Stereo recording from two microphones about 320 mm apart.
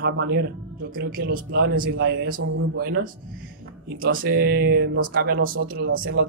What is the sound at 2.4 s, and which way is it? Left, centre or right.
Speech, right.